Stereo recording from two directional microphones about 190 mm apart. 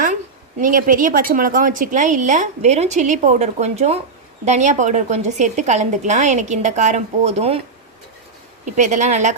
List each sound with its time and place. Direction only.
0.6 s a woman's voice: 45° right (ahead or behind)
8.7 s a woman's voice: 40° right (ahead or behind)